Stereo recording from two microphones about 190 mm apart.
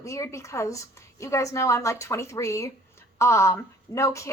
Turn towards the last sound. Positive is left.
turn(degrees=15)  # may be behind; listen again after turning